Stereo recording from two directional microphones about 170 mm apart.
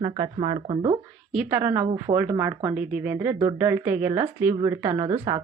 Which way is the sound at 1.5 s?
15° right (ahead or behind).